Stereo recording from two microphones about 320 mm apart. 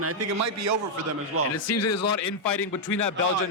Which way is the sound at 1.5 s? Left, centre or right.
Left.